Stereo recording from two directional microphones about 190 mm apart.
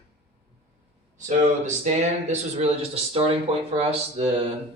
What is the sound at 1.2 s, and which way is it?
Speech, 40° right (ahead or behind).